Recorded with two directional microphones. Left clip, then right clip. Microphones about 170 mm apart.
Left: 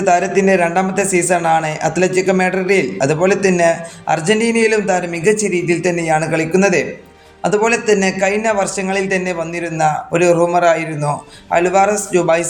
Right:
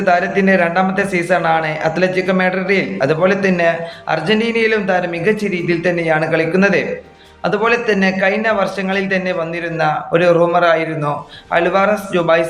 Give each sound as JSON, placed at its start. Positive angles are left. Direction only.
{"t": 0.0, "sound": "a man's voice", "side_deg": 45}